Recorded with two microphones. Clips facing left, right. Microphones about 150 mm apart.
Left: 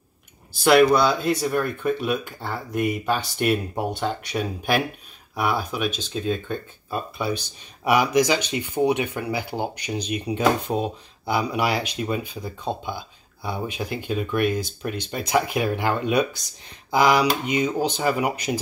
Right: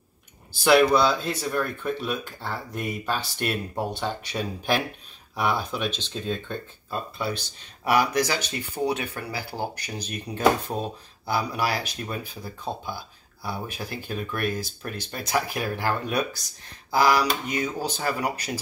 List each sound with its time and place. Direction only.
0.7 s speech: 10° left (ahead or behind)